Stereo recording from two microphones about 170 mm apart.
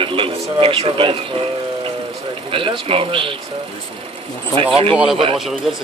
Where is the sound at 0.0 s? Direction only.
30° right (ahead or behind).